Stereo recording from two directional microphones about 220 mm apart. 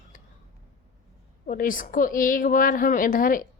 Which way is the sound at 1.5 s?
40° left (ahead or behind).